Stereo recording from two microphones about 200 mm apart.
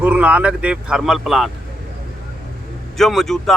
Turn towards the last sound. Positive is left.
turn(degrees=0)  # may be behind; listen again after turning